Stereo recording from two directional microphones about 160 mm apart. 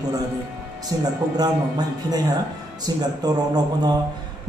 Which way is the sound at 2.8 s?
25° right (ahead or behind).